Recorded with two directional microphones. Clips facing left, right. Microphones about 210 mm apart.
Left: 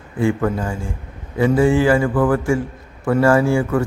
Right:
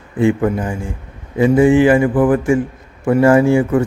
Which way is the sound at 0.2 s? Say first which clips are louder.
Right 4 dB; 20° right (ahead or behind).